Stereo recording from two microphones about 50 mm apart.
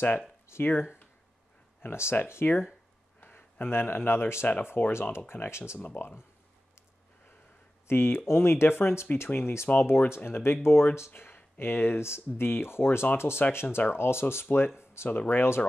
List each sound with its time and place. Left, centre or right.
0.5 s speech: left
1.8 s speech: left
3.2 s speech: left
4.6 s speech: left
5.3 s speech: left
7.9 s speech: left